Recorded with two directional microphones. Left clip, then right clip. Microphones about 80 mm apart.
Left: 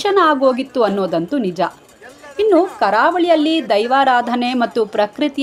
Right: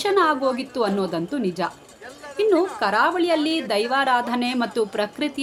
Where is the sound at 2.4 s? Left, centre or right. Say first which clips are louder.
Left 6 dB; left.